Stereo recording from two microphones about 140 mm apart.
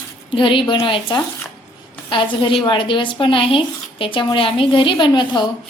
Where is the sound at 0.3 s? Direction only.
35° left (ahead or behind).